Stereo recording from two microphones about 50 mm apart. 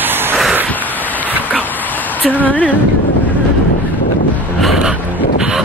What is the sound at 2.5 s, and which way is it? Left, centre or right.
Speech, left.